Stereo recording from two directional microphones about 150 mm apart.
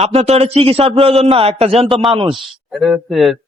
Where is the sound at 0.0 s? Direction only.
45° right (ahead or behind).